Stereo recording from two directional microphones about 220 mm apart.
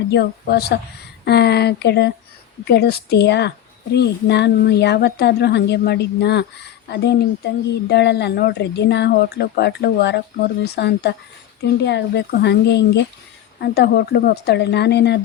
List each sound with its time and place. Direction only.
0.1 s speech: 50° left (ahead or behind)